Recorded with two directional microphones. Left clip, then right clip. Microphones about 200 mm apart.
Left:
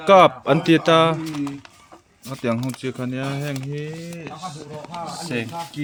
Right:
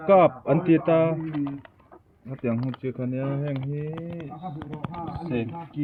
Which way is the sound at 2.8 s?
15° left (ahead or behind).